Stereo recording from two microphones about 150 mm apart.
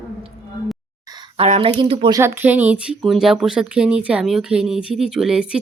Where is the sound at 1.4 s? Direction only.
40° right (ahead or behind).